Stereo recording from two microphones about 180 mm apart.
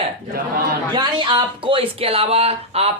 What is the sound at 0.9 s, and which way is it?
Speech, 25° right (ahead or behind).